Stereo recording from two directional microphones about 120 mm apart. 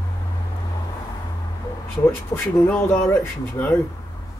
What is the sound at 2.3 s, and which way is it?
Speech, 30° left (ahead or behind).